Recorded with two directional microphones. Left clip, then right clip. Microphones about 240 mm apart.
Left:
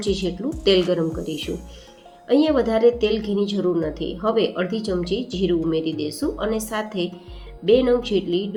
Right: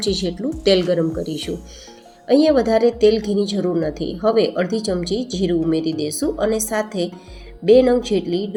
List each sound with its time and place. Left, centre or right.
0.0 s speech: right